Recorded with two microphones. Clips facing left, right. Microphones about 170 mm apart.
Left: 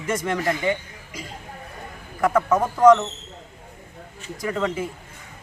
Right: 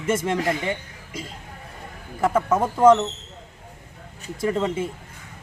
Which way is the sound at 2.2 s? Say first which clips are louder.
Left 1 dB; 25° right (ahead or behind).